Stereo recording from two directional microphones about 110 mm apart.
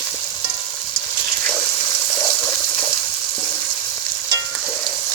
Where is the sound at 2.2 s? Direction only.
30° left (ahead or behind).